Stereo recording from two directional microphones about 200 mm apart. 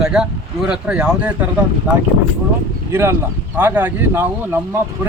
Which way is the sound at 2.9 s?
10° right (ahead or behind).